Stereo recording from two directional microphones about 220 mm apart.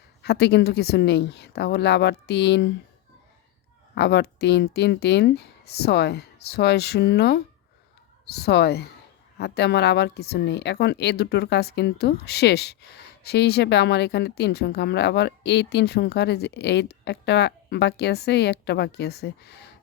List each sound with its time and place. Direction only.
0.2 s a woman's voice: 50° left (ahead or behind)
3.9 s a woman's voice: 50° left (ahead or behind)